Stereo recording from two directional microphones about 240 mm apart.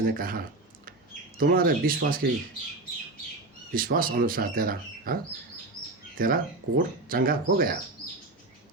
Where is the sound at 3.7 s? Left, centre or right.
Right.